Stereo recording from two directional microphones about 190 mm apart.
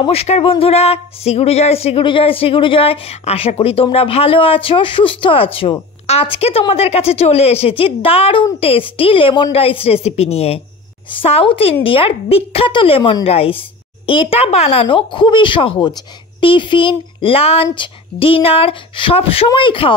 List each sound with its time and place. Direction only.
0.0 s a woman's voice: 30° left (ahead or behind)